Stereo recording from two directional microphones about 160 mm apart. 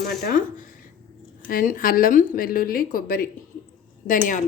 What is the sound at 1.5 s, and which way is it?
Speech, 60° left (ahead or behind).